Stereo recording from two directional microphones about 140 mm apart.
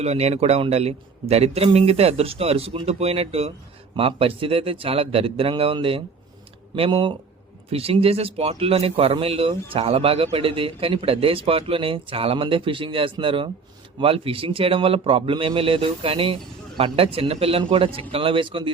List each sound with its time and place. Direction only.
0.0 s a man's voice: 50° right (ahead or behind)